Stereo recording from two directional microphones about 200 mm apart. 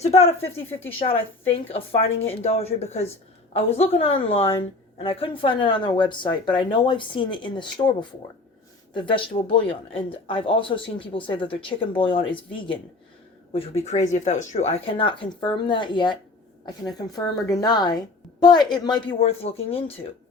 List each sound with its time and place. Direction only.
0.0 s a woman's voice: 30° left (ahead or behind)